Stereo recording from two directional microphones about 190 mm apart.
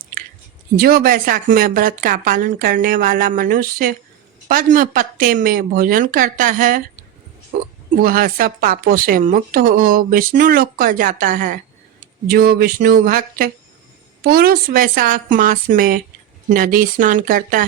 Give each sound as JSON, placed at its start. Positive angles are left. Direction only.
{"t": 0.8, "sound": "a woman's voice", "side_deg": -50}